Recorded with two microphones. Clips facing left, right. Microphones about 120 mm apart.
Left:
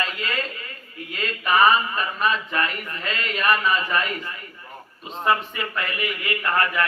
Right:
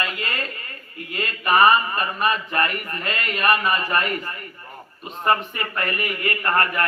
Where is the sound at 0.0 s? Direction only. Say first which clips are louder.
Even; 55° right (ahead or behind).